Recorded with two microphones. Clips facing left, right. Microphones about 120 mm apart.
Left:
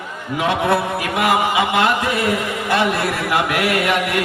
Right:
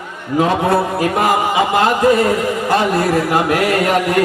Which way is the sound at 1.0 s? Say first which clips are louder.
Right 3 dB; 40° right (ahead or behind).